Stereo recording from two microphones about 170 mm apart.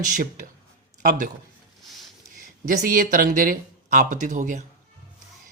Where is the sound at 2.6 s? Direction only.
55° right (ahead or behind).